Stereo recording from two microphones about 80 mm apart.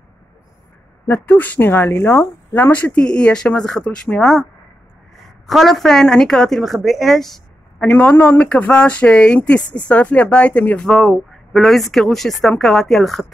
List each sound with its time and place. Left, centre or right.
1.0 s a woman's voice: left; by 7.4 s centre
7.8 s speech: left
10.9 s a woman's voice: centre